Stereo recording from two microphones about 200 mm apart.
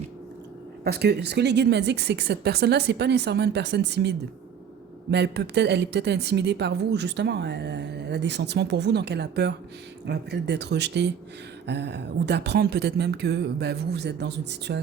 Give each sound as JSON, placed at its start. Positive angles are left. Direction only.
{"t": 0.9, "sound": "a woman's voice", "side_deg": -50}
{"t": 5.1, "sound": "a woman's voice", "side_deg": -55}